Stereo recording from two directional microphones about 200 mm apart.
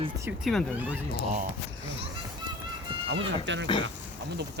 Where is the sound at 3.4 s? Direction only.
65° right (ahead or behind).